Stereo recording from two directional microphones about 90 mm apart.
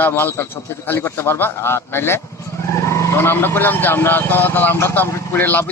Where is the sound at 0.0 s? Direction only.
20° left (ahead or behind).